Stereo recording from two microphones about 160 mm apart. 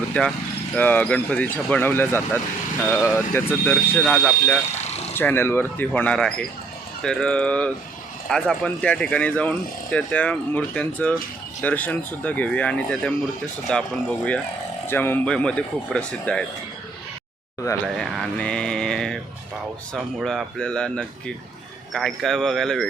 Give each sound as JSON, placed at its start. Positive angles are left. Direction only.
{"t": 0.1, "sound": "speech", "side_deg": 5}
{"t": 4.8, "sound": "a sound", "side_deg": 45}
{"t": 5.1, "sound": "speech", "side_deg": 15}
{"t": 14.8, "sound": "speech", "side_deg": 15}
{"t": 17.8, "sound": "speech", "side_deg": 0}